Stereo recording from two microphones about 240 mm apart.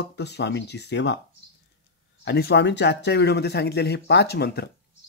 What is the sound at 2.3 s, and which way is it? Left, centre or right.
Speech, left.